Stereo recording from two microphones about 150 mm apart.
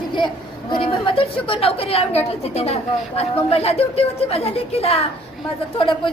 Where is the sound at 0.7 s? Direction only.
35° left (ahead or behind).